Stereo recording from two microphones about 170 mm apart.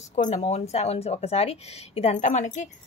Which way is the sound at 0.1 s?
45° left (ahead or behind).